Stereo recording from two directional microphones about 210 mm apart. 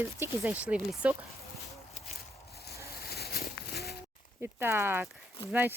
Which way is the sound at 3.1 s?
50° left (ahead or behind).